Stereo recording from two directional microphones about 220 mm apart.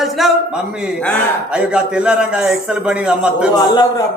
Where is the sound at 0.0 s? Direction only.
Centre (ahead or behind).